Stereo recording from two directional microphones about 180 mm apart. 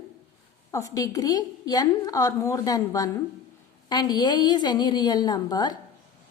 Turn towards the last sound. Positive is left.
turn(degrees=20)  # may be behind; listen again after turning